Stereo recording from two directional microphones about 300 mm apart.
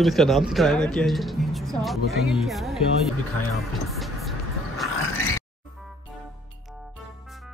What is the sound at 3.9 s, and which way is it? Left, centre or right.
Music, centre.